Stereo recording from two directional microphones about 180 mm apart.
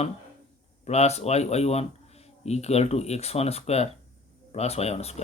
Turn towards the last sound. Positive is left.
turn(degrees=35)  # may be behind; listen again after turning